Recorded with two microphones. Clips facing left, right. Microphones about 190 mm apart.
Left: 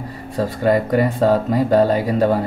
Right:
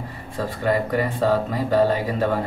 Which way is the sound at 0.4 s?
40° left (ahead or behind).